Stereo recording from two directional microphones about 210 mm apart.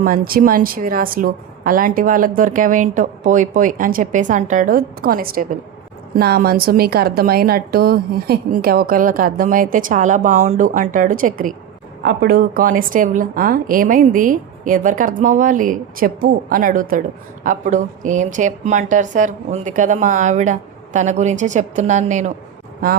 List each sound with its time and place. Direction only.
0.0 s a woman's voice: 45° right (ahead or behind)